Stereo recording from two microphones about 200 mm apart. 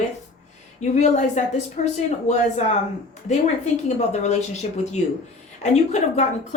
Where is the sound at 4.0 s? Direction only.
35° left (ahead or behind).